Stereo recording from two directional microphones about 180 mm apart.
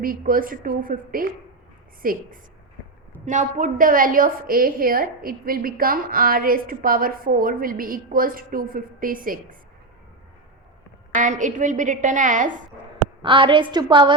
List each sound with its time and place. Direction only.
0.0 s a woman's voice: 50° right (ahead or behind)
11.1 s a woman's voice: 45° right (ahead or behind)
13.2 s a woman's voice: 30° right (ahead or behind)